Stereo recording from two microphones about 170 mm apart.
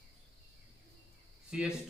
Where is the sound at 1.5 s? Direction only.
5° right (ahead or behind).